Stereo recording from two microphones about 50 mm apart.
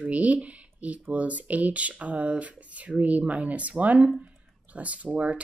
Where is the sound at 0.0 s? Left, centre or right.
Right.